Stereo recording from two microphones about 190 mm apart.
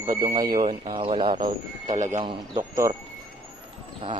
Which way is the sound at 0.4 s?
45° right (ahead or behind).